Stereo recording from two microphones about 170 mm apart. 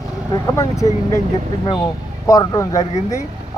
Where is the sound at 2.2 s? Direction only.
20° left (ahead or behind).